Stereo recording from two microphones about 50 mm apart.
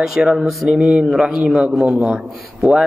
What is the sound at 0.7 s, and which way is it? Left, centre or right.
A man's voice, right.